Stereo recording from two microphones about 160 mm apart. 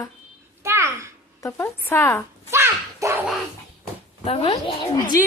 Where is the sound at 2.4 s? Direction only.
15° right (ahead or behind).